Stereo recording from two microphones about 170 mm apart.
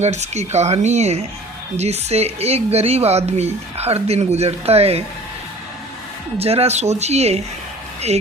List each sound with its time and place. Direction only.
0.0 s speech: 40° right (ahead or behind)
6.4 s speech: 35° right (ahead or behind)